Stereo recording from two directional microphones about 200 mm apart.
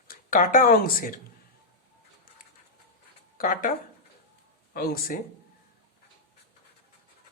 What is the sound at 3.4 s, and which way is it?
Speech, 45° left (ahead or behind).